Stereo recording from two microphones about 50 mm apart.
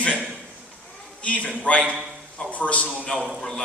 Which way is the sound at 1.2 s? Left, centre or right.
Left.